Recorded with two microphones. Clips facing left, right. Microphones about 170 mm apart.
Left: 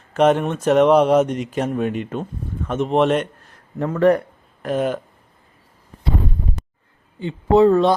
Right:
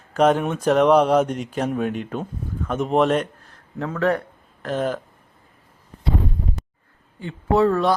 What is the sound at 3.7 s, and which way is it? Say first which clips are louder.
Speech: left 6 dB; 15° left (ahead or behind).